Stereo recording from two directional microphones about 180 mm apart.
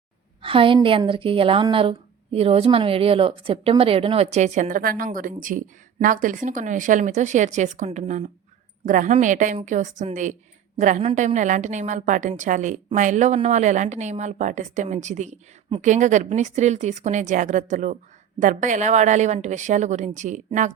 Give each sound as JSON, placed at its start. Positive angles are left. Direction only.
{"t": 0.4, "sound": "a woman's voice", "side_deg": -30}